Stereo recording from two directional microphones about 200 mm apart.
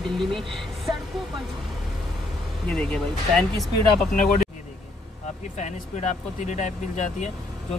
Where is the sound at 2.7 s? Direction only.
5° left (ahead or behind).